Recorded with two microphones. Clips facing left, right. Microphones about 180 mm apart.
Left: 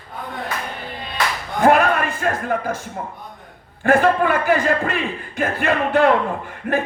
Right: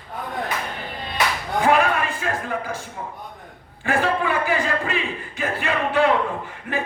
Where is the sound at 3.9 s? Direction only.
50° left (ahead or behind).